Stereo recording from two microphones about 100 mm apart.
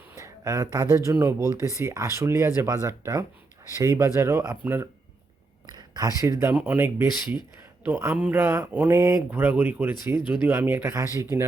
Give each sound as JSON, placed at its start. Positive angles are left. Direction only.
{"t": 0.2, "sound": "speech", "side_deg": -30}
{"t": 5.6, "sound": "speech", "side_deg": -40}
{"t": 9.0, "sound": "speech", "side_deg": -30}
{"t": 9.3, "sound": "speech", "side_deg": -20}
{"t": 10.8, "sound": "speech", "side_deg": -30}